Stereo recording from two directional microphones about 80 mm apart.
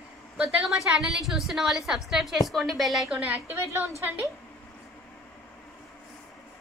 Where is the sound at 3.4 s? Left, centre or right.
Right.